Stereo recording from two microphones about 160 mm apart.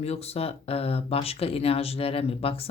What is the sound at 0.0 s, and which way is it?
Speech, 40° left (ahead or behind).